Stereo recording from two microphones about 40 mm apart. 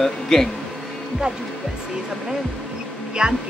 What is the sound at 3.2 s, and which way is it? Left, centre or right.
Cough, centre.